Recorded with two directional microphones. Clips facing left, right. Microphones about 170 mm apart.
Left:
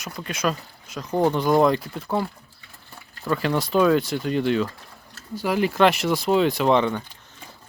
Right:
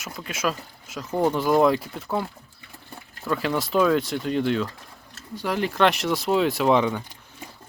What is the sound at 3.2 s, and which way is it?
Speech, centre (ahead or behind).